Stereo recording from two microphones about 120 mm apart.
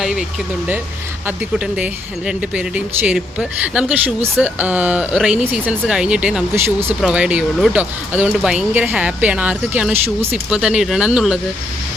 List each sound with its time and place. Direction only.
0.0 s vehicle: 5° right (ahead or behind)
1.5 s speech: 10° right (ahead or behind)